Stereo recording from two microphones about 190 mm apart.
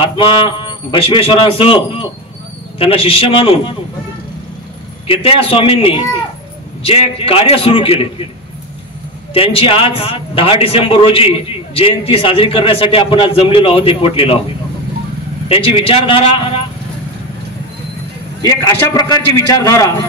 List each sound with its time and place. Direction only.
0.0 s a man's voice: 30° left (ahead or behind)
5.0 s a man's voice: 30° left (ahead or behind)
9.3 s a man's voice: 30° left (ahead or behind)
15.4 s a man's voice: 30° left (ahead or behind)
18.4 s a man's voice: 20° left (ahead or behind)